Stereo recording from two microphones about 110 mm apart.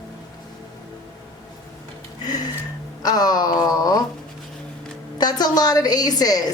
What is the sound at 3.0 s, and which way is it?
A woman's voice, 35° left (ahead or behind).